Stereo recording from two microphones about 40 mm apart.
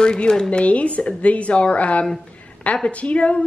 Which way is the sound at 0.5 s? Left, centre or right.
Left.